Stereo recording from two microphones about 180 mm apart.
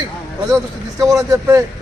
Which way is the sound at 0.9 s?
20° right (ahead or behind).